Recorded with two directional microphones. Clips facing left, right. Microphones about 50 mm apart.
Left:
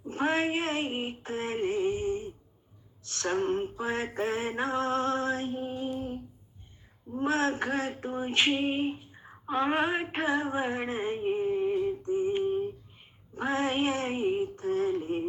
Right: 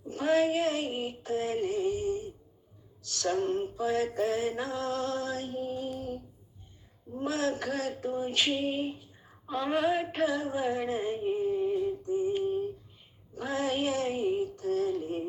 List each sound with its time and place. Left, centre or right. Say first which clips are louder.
0.1 s female singing: right 2 dB; left
3.0 s music: even; left
7.2 s female singing: left 3 dB; left
13.3 s music: left 2 dB; left